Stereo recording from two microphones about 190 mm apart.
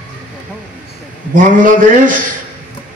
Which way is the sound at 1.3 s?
45° right (ahead or behind).